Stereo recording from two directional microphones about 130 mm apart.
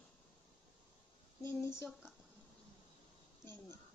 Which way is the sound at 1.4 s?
20° left (ahead or behind).